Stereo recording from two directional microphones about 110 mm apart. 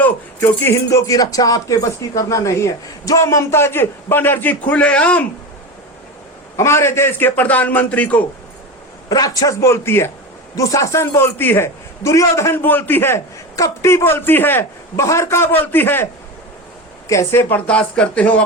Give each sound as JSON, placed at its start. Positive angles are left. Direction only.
{"t": 0.0, "sound": "a man's voice", "side_deg": 20}
{"t": 6.6, "sound": "a man's voice", "side_deg": 25}
{"t": 9.0, "sound": "a man's voice", "side_deg": 35}
{"t": 17.1, "sound": "a man's voice", "side_deg": 25}
{"t": 17.7, "sound": "a man's voice", "side_deg": 10}